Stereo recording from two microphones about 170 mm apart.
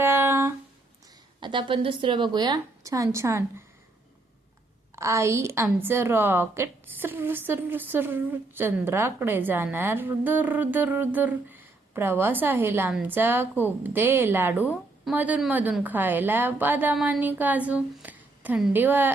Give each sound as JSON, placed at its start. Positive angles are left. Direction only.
{"t": 0.0, "sound": "a sound", "side_deg": -15}
{"t": 1.4, "sound": "a woman's voice", "side_deg": -30}
{"t": 4.9, "sound": "a woman's voice", "side_deg": -15}